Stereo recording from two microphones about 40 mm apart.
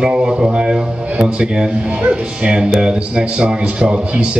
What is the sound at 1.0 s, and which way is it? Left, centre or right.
Speech, right.